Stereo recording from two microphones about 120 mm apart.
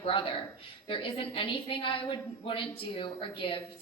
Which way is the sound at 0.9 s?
50° left (ahead or behind).